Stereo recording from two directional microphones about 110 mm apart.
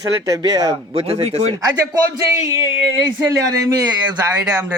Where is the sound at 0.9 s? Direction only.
65° right (ahead or behind).